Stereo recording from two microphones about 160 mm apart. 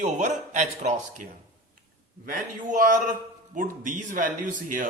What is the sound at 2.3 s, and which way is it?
Speech, 55° right (ahead or behind).